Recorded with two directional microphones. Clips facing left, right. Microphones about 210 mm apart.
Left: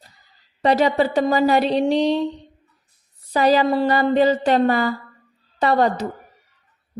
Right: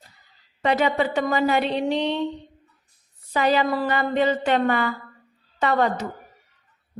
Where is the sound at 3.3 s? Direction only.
35° left (ahead or behind).